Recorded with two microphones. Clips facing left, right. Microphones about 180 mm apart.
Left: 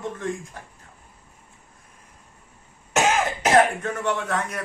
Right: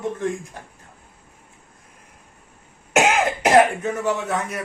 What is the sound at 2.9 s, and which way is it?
Cough, 15° right (ahead or behind).